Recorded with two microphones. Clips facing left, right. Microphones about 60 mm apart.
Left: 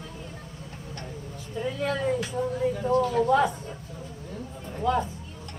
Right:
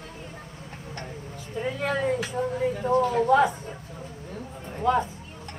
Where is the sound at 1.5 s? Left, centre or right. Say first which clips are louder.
Right 1 dB; right.